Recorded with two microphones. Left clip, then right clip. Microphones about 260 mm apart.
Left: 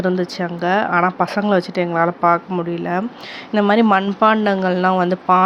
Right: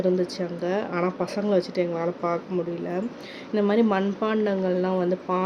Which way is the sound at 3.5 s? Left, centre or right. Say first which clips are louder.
Left 8 dB; left.